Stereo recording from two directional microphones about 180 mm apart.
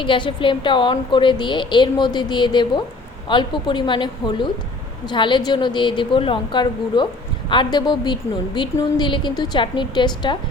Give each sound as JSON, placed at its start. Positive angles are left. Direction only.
{"t": 0.0, "sound": "a woman's voice", "side_deg": 25}